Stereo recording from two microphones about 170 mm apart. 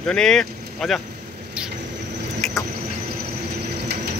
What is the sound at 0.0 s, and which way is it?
Speech, 5° left (ahead or behind).